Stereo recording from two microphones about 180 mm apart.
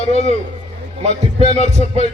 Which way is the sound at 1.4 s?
40° left (ahead or behind).